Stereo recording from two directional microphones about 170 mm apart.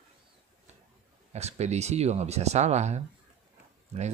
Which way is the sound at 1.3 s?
40° right (ahead or behind).